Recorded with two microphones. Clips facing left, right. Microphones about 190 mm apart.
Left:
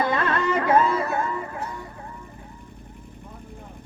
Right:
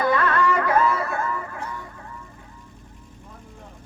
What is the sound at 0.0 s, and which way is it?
Music, 25° left (ahead or behind).